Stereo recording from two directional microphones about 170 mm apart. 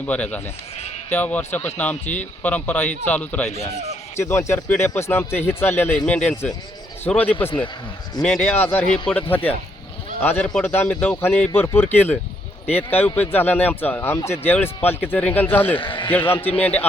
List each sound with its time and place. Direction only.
0.0 s speech: 10° left (ahead or behind)
15.8 s a man's voice: 30° left (ahead or behind)
16.0 s speech: 10° left (ahead or behind)